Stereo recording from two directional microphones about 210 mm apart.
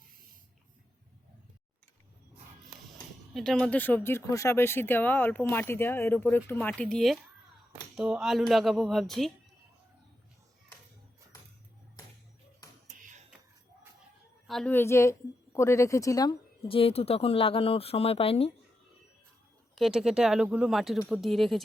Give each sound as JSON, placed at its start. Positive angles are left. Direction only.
{"t": 3.3, "sound": "speech", "side_deg": 5}
{"t": 14.4, "sound": "a woman's voice", "side_deg": 0}
{"t": 19.7, "sound": "speech", "side_deg": 0}